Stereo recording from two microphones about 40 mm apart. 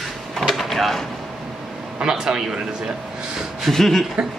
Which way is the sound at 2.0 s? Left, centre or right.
Centre.